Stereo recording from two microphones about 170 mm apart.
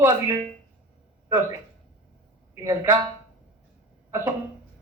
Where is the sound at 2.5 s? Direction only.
20° right (ahead or behind).